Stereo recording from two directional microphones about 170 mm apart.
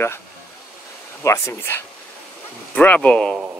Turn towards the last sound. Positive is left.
turn(degrees=5)  # may be behind; listen again after turning